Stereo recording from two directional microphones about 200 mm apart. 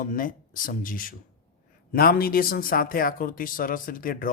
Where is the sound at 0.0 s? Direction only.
45° left (ahead or behind).